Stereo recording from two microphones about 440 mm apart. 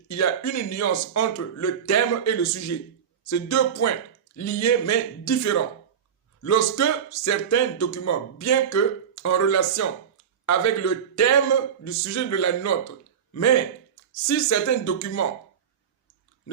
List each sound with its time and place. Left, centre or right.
0.1 s speech: left
7.1 s speech: left
7.5 s a man's voice: left